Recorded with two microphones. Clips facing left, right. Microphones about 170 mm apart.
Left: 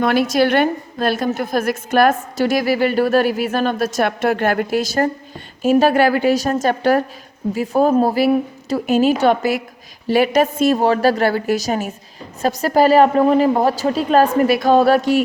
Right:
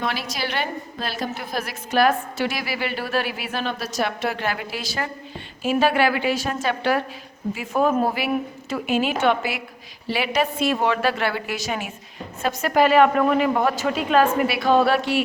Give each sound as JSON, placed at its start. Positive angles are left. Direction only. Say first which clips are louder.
{"t": 0.0, "sound": "a woman's voice", "louder": "left 12 dB", "side_deg": 50}